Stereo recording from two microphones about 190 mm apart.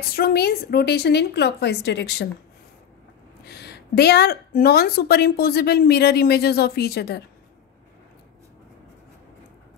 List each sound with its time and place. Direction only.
0.1 s a woman's voice: 55° left (ahead or behind)
3.4 s a woman's voice: 60° left (ahead or behind)